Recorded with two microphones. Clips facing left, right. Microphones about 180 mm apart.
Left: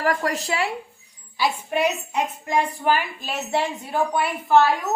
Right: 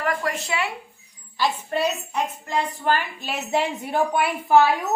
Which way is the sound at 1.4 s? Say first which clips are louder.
Left 1 dB; 10° left (ahead or behind).